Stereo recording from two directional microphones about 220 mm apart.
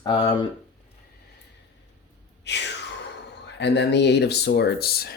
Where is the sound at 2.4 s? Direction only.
50° left (ahead or behind).